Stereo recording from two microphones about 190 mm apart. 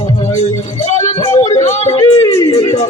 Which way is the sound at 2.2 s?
15° left (ahead or behind).